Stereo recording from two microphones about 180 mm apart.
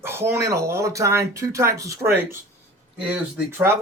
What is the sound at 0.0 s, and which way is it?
Speech, 15° right (ahead or behind).